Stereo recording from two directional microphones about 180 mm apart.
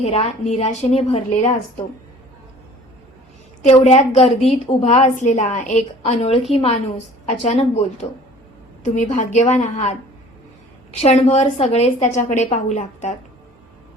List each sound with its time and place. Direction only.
0.0 s a woman's voice: 35° left (ahead or behind)
3.6 s a woman's voice: 40° left (ahead or behind)
11.0 s a woman's voice: 35° left (ahead or behind)